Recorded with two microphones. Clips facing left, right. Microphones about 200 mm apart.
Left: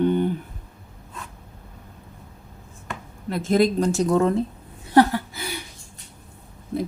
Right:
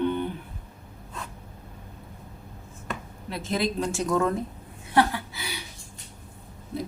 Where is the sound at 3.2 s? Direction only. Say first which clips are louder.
Left 8 dB; 50° left (ahead or behind); by 4.4 s 30° left (ahead or behind).